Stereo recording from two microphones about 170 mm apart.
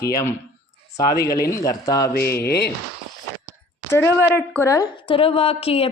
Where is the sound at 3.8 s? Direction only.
15° left (ahead or behind).